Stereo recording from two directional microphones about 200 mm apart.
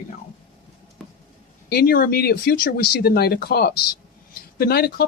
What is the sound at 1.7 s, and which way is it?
A man's voice, 50° left (ahead or behind).